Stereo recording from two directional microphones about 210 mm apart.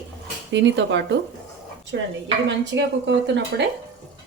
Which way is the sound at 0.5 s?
60° right (ahead or behind).